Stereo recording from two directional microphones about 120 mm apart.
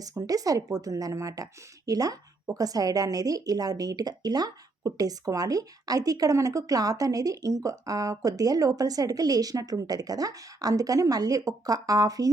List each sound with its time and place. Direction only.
0.0 s a woman's voice: 30° right (ahead or behind)